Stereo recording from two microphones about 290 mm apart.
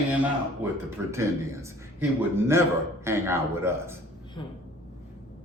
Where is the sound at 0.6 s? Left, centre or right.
Centre.